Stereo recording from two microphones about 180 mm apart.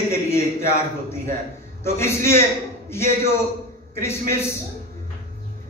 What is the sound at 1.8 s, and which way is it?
Speech, 15° left (ahead or behind).